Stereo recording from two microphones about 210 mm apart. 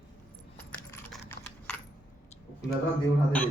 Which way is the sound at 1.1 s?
5° left (ahead or behind).